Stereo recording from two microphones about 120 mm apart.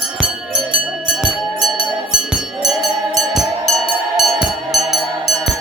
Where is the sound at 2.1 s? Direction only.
5° right (ahead or behind).